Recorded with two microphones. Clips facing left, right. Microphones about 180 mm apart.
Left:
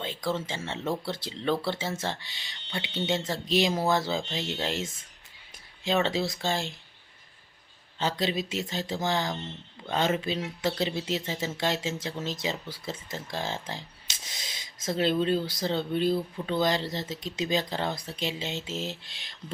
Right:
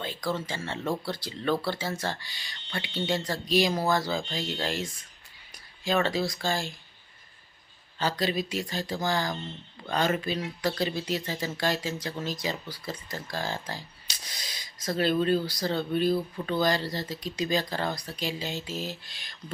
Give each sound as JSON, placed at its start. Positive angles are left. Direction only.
{"t": 0.3, "sound": "speech", "side_deg": 25}
{"t": 7.9, "sound": "speech", "side_deg": 25}